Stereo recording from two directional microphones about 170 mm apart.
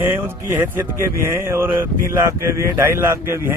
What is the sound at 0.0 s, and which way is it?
Speech, 15° right (ahead or behind).